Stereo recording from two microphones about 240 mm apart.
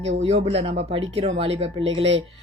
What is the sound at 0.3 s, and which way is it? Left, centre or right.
A woman's voice, right.